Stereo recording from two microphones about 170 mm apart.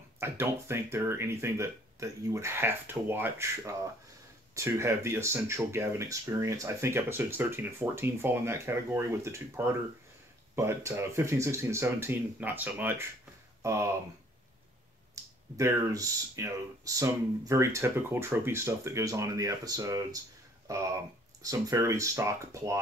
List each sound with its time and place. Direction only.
0.2 s speech: 15° right (ahead or behind)
15.2 s a sound: 20° right (ahead or behind)
15.5 s speech: 20° right (ahead or behind)